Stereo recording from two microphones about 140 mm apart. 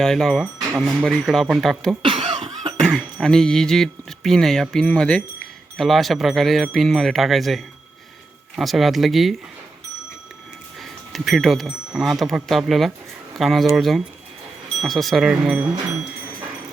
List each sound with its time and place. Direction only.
0.0 s speech: 5° left (ahead or behind)
2.0 s cough: 40° right (ahead or behind)
2.8 s speech: 5° left (ahead or behind)
11.1 s speech: centre (ahead or behind)